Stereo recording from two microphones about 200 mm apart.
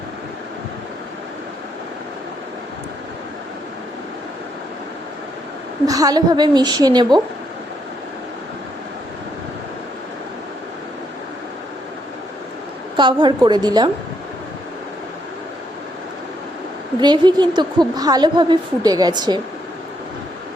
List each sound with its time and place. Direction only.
5.8 s a woman's voice: 20° right (ahead or behind)
13.0 s a woman's voice: 25° right (ahead or behind)
17.0 s a woman's voice: 20° right (ahead or behind)